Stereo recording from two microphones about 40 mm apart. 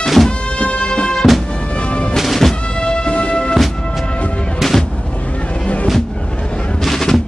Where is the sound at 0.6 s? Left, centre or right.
Left.